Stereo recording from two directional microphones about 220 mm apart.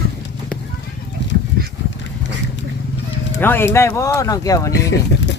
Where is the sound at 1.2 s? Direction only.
55° left (ahead or behind).